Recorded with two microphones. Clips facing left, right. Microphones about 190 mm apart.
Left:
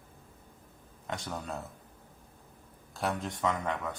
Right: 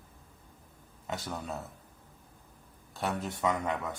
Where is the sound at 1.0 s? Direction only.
5° right (ahead or behind).